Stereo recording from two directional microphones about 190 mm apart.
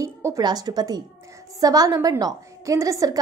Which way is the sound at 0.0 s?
15° right (ahead or behind).